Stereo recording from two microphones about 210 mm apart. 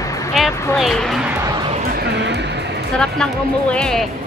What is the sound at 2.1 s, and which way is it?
Speech, 55° right (ahead or behind).